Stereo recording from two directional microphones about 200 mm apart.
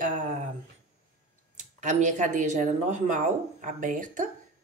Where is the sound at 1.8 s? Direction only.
35° right (ahead or behind).